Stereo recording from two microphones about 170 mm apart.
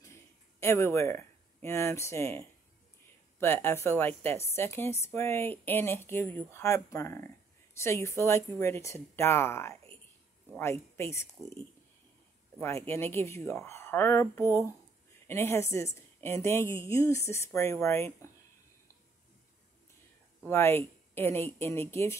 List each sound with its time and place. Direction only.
0.0 s a sound: 15° left (ahead or behind)
3.3 s a woman's voice: 15° left (ahead or behind)
12.5 s a woman's voice: 15° left (ahead or behind)
20.4 s a woman's voice: 15° left (ahead or behind)